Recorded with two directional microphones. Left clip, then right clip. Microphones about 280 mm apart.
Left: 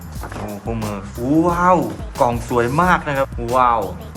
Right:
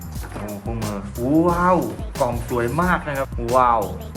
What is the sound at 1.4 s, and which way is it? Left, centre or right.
Speech, centre.